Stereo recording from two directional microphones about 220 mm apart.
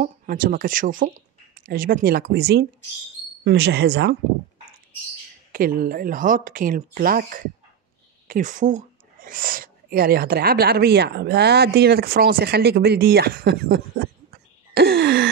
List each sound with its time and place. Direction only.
0.0 s speech: 40° right (ahead or behind)
5.5 s speech: 40° right (ahead or behind)
14.7 s a sound: 50° right (ahead or behind)